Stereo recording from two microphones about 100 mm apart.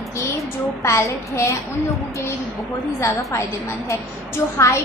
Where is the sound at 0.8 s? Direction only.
30° left (ahead or behind).